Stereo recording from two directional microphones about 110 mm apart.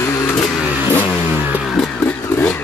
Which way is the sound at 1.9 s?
15° left (ahead or behind).